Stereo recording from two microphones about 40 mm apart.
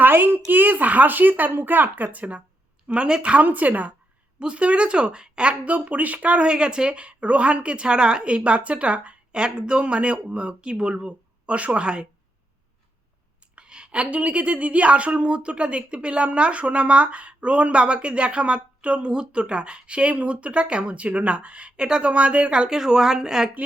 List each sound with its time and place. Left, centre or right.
0.0 s speech: right
2.8 s speech: right
3.4 s speech: right
4.4 s speech: right
13.6 s a woman's voice: right
21.8 s speech: right
22.1 s speech: right
22.8 s a woman's voice: centre